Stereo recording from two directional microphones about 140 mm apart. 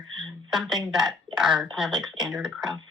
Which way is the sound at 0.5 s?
Centre (ahead or behind).